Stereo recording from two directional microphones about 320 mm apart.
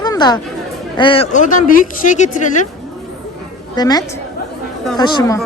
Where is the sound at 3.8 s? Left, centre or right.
Centre.